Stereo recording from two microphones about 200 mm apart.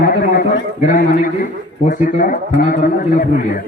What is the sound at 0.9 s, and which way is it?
A man's voice, 45° left (ahead or behind).